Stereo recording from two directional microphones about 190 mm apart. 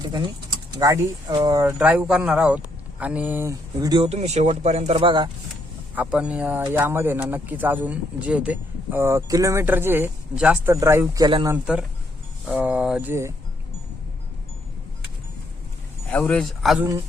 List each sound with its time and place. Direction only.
0.7 s speech: 20° right (ahead or behind)
5.9 s speech: 10° right (ahead or behind); by 11.5 s 25° right (ahead or behind)
11.5 s speech: 5° right (ahead or behind)
16.1 s speech: 5° left (ahead or behind)